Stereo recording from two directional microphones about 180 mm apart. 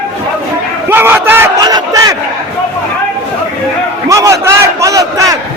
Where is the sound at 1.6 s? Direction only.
20° right (ahead or behind).